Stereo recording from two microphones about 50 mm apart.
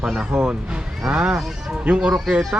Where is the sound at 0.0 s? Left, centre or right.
Centre.